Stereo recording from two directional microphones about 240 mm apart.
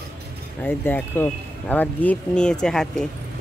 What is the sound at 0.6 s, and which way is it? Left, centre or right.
Speech, centre.